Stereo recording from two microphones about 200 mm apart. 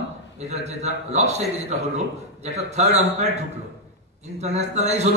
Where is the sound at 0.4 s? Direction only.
35° right (ahead or behind).